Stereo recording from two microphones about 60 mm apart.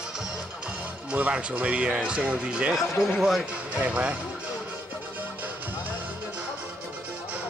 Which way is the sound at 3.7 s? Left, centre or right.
Right.